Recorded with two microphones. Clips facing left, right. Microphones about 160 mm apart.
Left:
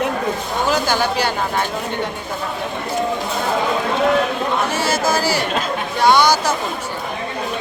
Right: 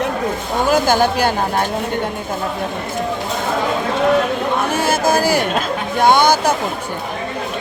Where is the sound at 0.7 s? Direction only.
50° right (ahead or behind).